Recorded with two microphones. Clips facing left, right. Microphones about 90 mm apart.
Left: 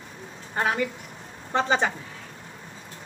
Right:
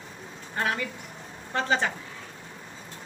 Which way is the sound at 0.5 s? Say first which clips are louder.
Left 4 dB; 25° left (ahead or behind).